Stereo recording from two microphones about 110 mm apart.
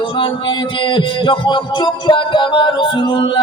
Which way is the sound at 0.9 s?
45° left (ahead or behind).